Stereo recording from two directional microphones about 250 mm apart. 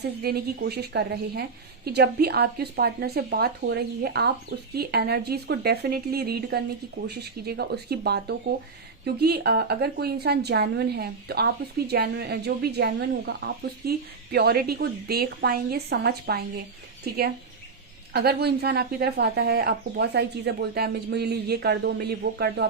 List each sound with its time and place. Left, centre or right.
0.0 s a woman's voice: right
18.1 s a woman's voice: right